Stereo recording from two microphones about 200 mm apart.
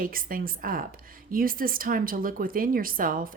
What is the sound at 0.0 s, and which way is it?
A woman's voice, 45° right (ahead or behind).